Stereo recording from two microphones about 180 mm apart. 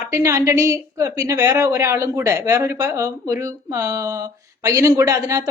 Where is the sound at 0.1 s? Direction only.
15° right (ahead or behind).